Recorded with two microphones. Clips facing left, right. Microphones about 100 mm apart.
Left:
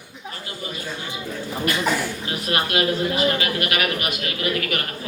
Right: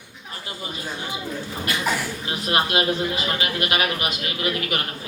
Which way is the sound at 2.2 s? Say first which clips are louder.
Right 1 dB; 25° right (ahead or behind).